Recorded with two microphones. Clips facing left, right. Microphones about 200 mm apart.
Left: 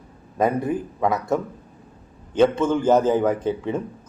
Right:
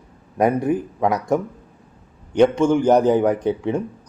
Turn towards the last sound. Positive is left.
turn(degrees=-15)  # may be behind; listen again after turning